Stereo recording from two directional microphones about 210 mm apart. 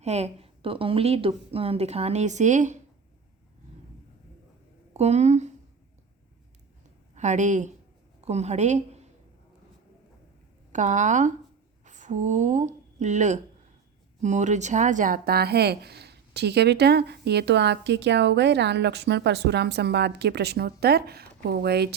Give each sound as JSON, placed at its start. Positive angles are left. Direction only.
{"t": 0.0, "sound": "a woman's voice", "side_deg": -30}
{"t": 4.9, "sound": "speech", "side_deg": -30}
{"t": 7.2, "sound": "a woman's voice", "side_deg": -35}
{"t": 10.7, "sound": "speech", "side_deg": -35}